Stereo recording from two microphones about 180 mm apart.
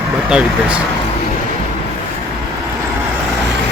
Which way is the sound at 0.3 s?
5° right (ahead or behind).